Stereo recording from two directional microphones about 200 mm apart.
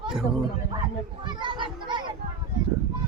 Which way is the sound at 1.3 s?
25° right (ahead or behind).